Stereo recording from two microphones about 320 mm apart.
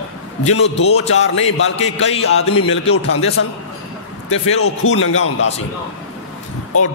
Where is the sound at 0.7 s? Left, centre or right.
Centre.